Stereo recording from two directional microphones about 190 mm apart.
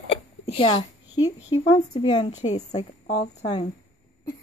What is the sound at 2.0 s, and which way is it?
Speech, 25° left (ahead or behind).